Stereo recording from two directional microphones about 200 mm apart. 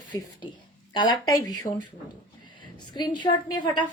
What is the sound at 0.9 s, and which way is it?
Speech, 20° left (ahead or behind).